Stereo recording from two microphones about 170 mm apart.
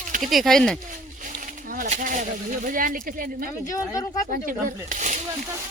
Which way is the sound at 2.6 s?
55° right (ahead or behind).